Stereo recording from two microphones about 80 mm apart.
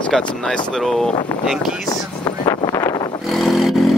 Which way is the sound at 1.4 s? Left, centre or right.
Centre.